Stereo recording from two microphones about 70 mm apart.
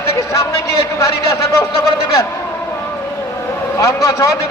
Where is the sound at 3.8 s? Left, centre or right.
Left.